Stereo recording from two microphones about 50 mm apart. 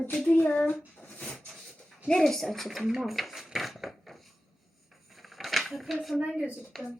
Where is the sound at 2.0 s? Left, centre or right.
Centre.